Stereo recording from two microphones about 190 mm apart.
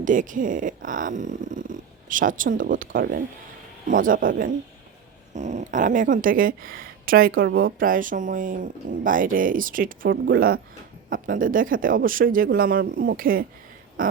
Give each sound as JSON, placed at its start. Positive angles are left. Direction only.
{"t": 0.0, "sound": "speech", "side_deg": -45}